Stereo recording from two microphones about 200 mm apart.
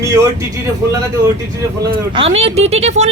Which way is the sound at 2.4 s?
30° right (ahead or behind).